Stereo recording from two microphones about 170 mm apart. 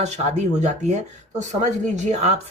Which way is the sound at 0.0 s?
40° right (ahead or behind).